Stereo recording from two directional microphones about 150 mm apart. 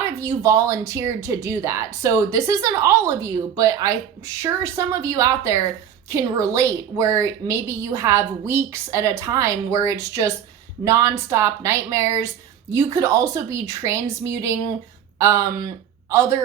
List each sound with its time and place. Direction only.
0.0 s a woman's voice: 20° right (ahead or behind)